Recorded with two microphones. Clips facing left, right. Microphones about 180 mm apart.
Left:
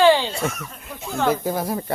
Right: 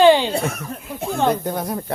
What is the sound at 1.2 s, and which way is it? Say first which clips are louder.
Speech: left 2 dB; 5° left (ahead or behind).